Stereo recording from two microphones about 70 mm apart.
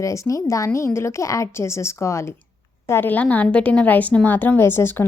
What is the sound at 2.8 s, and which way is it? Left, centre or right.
A woman's voice, left.